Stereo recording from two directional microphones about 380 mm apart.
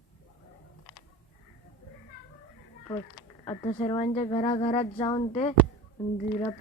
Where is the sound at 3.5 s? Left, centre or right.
Centre.